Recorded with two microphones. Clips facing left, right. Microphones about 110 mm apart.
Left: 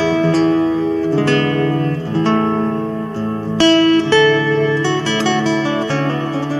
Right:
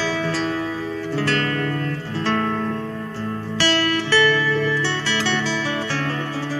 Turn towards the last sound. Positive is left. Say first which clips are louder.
# left 6 dB
turn(degrees=30)  # may be behind; listen again after turning